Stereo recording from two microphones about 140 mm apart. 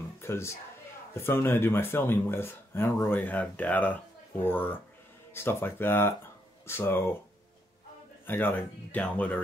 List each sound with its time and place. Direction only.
0.2 s a sound: 20° left (ahead or behind)
1.1 s speech: 15° left (ahead or behind)
8.3 s speech: 15° left (ahead or behind)